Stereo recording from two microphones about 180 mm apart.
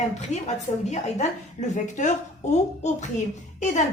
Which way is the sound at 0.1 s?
40° left (ahead or behind).